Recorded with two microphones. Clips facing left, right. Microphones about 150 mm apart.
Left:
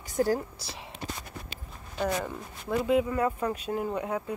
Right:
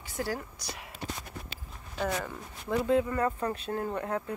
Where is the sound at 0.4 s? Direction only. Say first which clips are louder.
Left 2 dB; 30° left (ahead or behind).